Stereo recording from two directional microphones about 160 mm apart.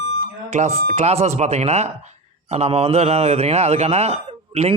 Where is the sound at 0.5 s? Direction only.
45° right (ahead or behind).